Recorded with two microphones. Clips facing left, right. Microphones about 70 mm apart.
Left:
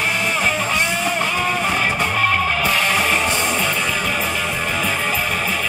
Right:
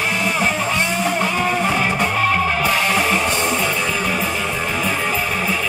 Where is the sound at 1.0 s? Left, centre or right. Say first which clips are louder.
Right 1 dB; right.